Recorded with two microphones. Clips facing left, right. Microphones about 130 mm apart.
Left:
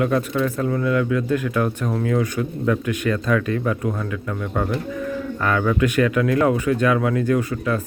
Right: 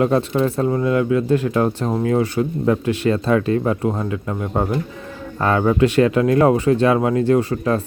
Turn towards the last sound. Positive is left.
turn(degrees=-35)  # may be behind; listen again after turning